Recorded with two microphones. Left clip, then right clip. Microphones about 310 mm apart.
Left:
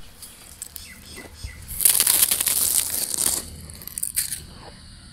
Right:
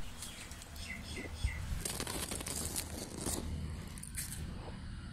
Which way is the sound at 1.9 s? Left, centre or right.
Left.